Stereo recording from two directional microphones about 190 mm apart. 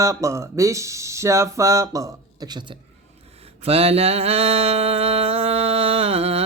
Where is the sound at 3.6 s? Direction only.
30° right (ahead or behind).